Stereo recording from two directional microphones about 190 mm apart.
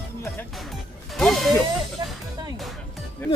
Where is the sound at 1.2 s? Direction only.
Centre (ahead or behind).